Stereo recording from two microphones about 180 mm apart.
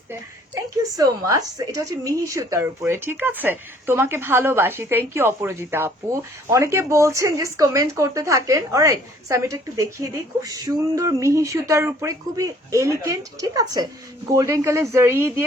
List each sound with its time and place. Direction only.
0.8 s a woman's voice: 20° right (ahead or behind)